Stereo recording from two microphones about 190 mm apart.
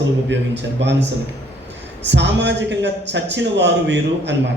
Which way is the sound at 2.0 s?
65° right (ahead or behind).